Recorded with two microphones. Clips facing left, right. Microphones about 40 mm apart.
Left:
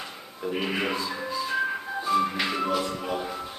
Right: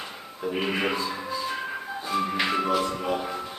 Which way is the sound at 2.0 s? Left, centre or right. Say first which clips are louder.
Left 1 dB; centre.